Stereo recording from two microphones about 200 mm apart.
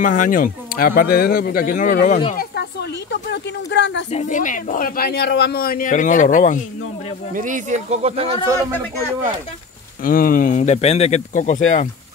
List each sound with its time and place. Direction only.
0.0 s speech: 40° left (ahead or behind); by 4.0 s 65° left (ahead or behind)
4.1 s speech: 35° left (ahead or behind)
7.3 s speech: 40° right (ahead or behind)
10.0 s speech: 45° left (ahead or behind)